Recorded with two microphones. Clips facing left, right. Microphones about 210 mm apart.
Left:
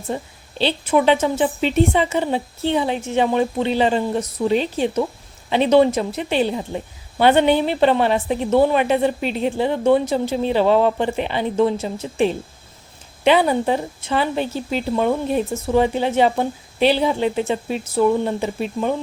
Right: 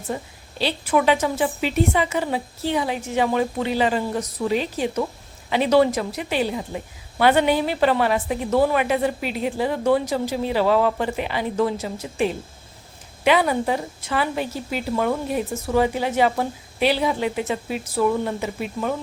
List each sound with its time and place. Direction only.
0.1 s a woman's voice: 25° left (ahead or behind)